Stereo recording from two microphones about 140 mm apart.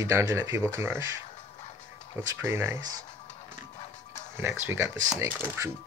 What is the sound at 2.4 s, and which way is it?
Speech, 20° right (ahead or behind).